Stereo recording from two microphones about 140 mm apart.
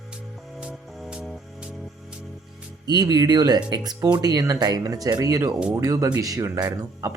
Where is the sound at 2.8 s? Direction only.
30° right (ahead or behind).